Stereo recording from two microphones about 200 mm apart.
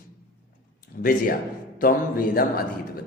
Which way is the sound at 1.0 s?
45° left (ahead or behind).